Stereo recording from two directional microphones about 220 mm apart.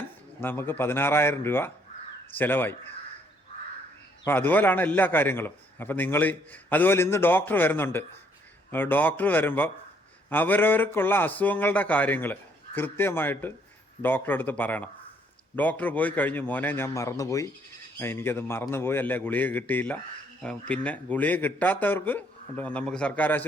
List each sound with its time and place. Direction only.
0.3 s a man's voice: 10° left (ahead or behind)
4.2 s a man's voice: 10° left (ahead or behind)